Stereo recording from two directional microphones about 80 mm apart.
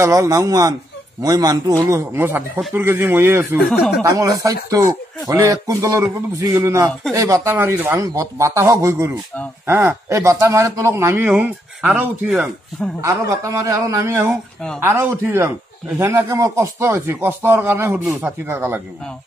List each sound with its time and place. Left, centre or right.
0.0 s speech: right
1.9 s a man's voice: right
4.0 s a man's voice: right
7.5 s speech: right
8.0 s a man's voice: right
11.2 s speech: centre
13.0 s a man's voice: right
14.8 s a man's voice: right